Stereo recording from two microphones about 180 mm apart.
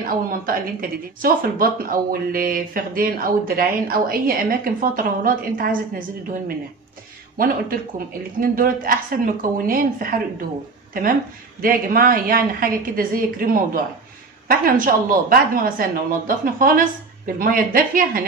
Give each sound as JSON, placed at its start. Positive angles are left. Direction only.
{"t": 0.0, "sound": "speech", "side_deg": -55}
{"t": 8.4, "sound": "speech", "side_deg": -50}